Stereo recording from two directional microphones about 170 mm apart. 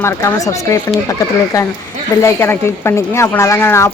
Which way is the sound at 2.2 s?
15° left (ahead or behind).